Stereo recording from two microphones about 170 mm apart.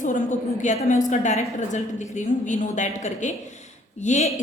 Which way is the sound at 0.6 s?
45° left (ahead or behind).